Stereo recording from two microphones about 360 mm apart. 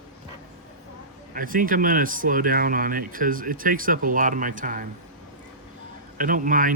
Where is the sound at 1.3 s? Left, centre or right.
Right.